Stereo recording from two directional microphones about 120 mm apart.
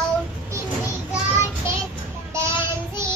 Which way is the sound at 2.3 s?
20° right (ahead or behind).